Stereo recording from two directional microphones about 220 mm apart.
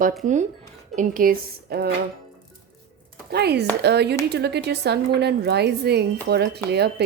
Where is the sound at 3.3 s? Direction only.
50° right (ahead or behind).